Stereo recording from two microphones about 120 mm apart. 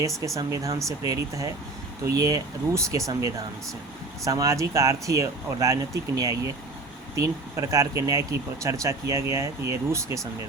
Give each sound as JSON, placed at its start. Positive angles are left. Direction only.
{"t": 0.3, "sound": "speech", "side_deg": -25}